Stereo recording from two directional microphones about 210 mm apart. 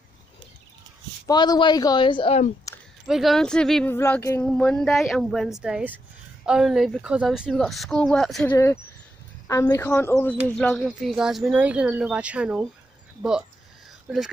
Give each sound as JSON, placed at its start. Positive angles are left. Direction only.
{"t": 1.2, "sound": "a woman's voice", "side_deg": 20}
{"t": 3.1, "sound": "speech", "side_deg": 0}
{"t": 9.5, "sound": "speech", "side_deg": 15}
{"t": 14.0, "sound": "speech", "side_deg": 0}